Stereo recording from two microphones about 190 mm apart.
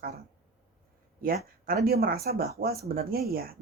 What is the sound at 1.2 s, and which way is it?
Speech, 50° right (ahead or behind).